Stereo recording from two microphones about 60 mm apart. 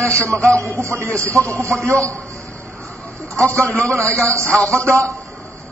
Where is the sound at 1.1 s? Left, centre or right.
Right.